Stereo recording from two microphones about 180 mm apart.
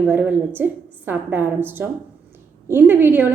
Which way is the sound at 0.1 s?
10° right (ahead or behind).